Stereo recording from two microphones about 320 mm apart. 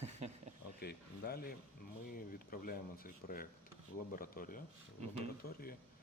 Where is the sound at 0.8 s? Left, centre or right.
Left.